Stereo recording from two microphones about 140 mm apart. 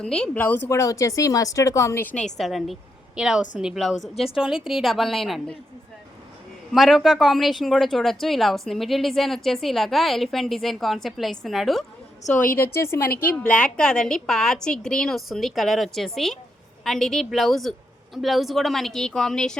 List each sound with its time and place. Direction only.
0.0 s speech: 5° left (ahead or behind)
2.4 s speech: centre (ahead or behind)
6.7 s speech: centre (ahead or behind)
12.8 s a woman's voice: 20° left (ahead or behind)